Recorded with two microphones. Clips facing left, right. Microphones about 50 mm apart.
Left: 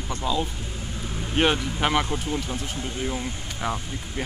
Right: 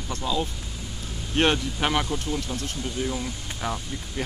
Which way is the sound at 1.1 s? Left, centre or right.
Left.